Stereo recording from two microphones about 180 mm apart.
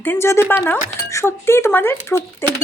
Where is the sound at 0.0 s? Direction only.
10° left (ahead or behind).